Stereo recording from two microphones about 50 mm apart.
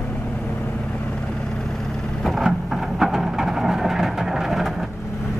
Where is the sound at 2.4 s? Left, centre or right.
Centre.